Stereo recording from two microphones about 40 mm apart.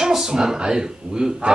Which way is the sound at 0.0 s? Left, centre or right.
Centre.